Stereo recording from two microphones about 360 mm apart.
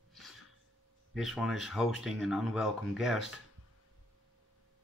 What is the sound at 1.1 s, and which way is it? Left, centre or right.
Speech, centre.